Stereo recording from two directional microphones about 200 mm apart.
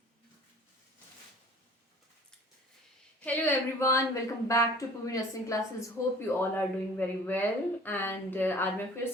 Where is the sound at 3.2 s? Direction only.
10° left (ahead or behind).